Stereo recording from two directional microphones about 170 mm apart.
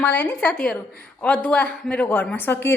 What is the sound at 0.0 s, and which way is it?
A woman's voice, 10° left (ahead or behind).